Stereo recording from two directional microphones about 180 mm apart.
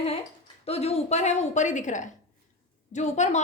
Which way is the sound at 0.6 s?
35° left (ahead or behind).